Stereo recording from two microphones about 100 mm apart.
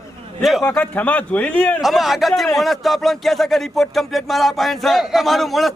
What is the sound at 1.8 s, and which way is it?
Speech, centre (ahead or behind).